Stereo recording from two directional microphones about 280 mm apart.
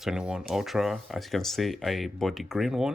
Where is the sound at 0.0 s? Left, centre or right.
Centre.